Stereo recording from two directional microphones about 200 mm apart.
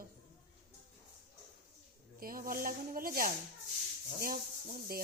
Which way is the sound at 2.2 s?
45° right (ahead or behind).